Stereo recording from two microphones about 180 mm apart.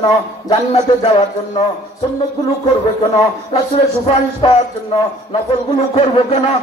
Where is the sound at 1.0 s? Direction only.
25° left (ahead or behind).